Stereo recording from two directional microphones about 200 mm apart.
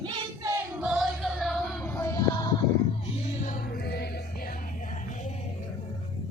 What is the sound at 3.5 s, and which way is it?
Music, 45° left (ahead or behind).